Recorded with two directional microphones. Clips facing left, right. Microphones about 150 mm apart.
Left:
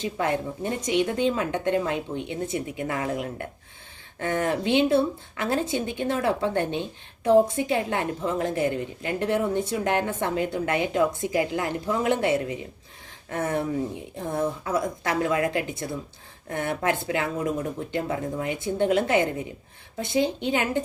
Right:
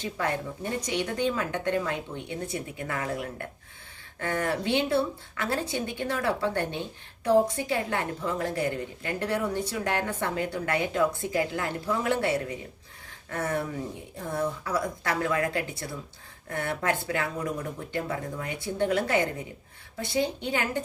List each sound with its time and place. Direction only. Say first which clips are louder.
0.0 s a woman's voice: left 4 dB; 20° left (ahead or behind)